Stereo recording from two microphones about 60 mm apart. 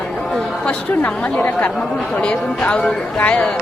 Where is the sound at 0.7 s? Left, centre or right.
Left.